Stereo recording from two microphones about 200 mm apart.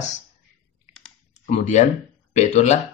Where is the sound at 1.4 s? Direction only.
35° left (ahead or behind).